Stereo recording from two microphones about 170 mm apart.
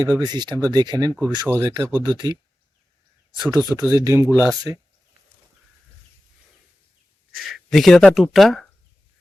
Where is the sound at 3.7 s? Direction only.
20° right (ahead or behind).